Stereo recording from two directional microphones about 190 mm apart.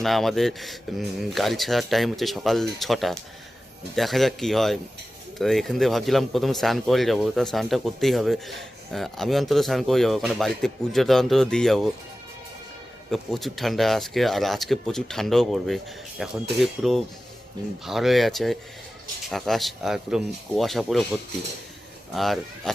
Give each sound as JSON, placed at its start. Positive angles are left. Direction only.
{"t": 0.0, "sound": "speech", "side_deg": 0}
{"t": 13.1, "sound": "speech", "side_deg": 0}
{"t": 22.1, "sound": "speech", "side_deg": 0}